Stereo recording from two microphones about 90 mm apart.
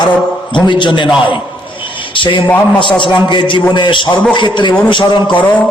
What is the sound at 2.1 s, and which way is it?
Speech, 65° left (ahead or behind).